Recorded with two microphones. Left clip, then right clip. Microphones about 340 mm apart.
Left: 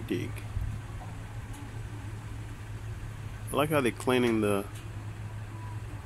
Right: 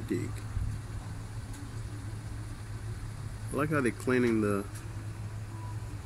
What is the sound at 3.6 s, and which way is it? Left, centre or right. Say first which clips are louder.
Speech: left 3 dB; centre.